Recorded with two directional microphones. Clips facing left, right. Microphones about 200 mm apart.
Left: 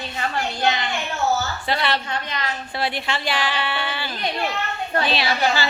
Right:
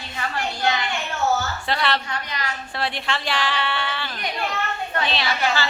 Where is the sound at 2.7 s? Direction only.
Centre (ahead or behind).